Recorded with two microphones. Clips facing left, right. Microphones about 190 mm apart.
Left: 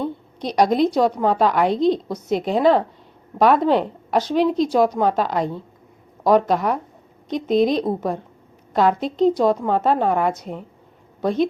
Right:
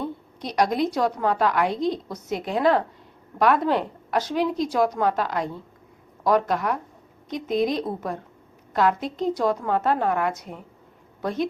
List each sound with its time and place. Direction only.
0.6 s a woman's voice: 25° left (ahead or behind)